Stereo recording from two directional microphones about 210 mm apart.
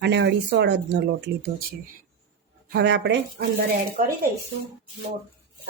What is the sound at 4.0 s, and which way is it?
Speech, 40° right (ahead or behind).